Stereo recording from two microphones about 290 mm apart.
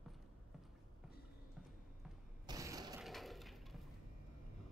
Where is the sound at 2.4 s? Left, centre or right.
Centre.